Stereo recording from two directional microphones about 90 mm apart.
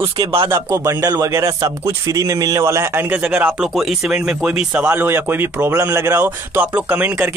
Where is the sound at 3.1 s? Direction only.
20° right (ahead or behind).